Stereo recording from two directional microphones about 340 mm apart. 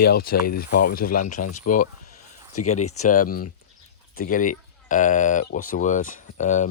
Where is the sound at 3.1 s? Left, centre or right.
Left.